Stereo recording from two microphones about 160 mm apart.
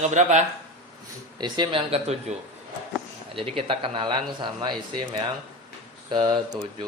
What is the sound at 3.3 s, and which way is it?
Speech, 35° right (ahead or behind).